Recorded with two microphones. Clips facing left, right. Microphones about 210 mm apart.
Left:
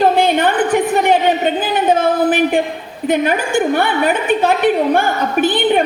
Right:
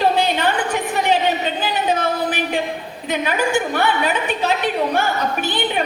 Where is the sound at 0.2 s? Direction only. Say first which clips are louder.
Left 5 dB; 50° left (ahead or behind).